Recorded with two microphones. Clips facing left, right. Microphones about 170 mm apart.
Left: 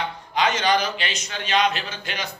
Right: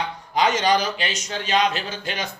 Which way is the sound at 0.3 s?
40° right (ahead or behind).